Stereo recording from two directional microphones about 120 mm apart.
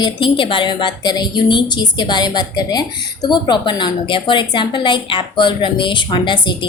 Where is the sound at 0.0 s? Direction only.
45° left (ahead or behind).